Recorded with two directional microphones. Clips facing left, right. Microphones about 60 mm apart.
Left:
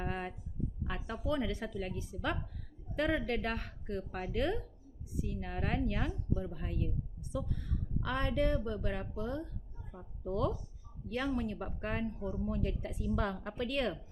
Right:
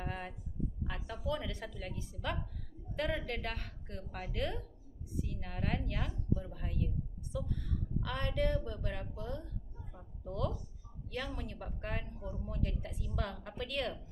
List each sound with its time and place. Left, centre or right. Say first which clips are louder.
0.0 s a sound: left 3 dB; left
1.2 s a woman's voice: left 4 dB; centre
8.0 s a woman's voice: left 3 dB; left
11.1 s a woman's voice: left 7 dB; left